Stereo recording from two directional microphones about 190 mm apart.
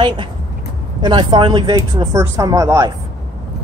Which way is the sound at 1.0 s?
25° right (ahead or behind).